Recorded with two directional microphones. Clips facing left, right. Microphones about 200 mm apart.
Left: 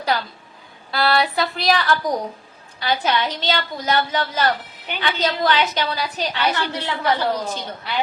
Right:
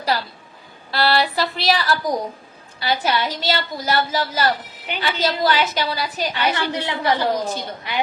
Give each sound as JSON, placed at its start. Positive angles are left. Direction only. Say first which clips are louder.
{"t": 0.0, "sound": "a woman's voice", "louder": "even", "side_deg": -5}
{"t": 0.9, "sound": "a sound", "louder": "even", "side_deg": 0}
{"t": 2.8, "sound": "a woman's voice", "louder": "even", "side_deg": -10}